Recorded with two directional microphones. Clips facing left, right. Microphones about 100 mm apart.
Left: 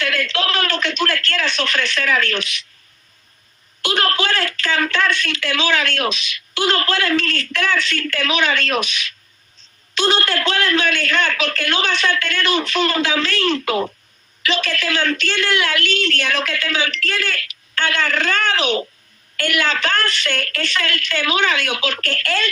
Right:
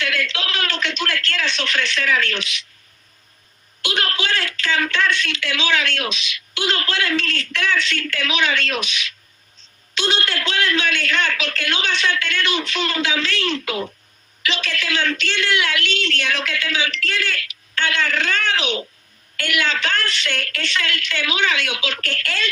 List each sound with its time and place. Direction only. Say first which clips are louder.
0.0 s a man's voice: left 3 dB; 45° left (ahead or behind)
3.8 s a woman's voice: left 5 dB; 45° left (ahead or behind)